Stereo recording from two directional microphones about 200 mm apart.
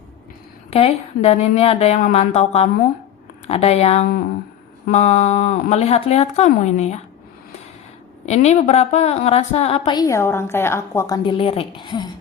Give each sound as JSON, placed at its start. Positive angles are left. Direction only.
{"t": 0.7, "sound": "speech", "side_deg": 30}
{"t": 8.3, "sound": "a woman's voice", "side_deg": 35}